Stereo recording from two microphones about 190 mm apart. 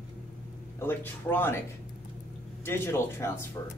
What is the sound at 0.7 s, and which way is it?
Speech, 10° left (ahead or behind).